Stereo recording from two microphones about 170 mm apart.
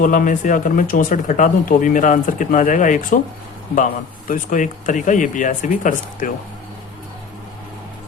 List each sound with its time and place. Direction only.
0.0 s speech: 50° left (ahead or behind)
4.3 s speech: 50° left (ahead or behind)